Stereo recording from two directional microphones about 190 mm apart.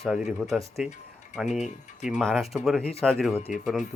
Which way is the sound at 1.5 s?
40° left (ahead or behind).